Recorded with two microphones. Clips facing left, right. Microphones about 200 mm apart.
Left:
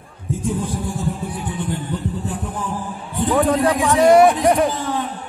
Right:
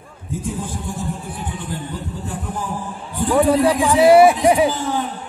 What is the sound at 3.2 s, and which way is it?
Music, centre (ahead or behind).